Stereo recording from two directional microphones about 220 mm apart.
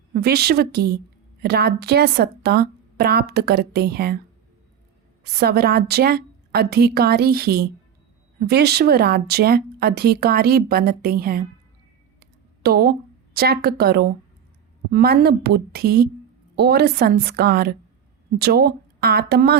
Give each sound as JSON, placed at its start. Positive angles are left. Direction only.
{"t": 0.1, "sound": "speech", "side_deg": -45}
{"t": 5.2, "sound": "speech", "side_deg": -45}
{"t": 12.2, "sound": "a sound", "side_deg": -45}
{"t": 13.3, "sound": "speech", "side_deg": -45}